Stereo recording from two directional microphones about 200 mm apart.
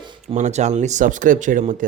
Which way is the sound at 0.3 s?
35° right (ahead or behind).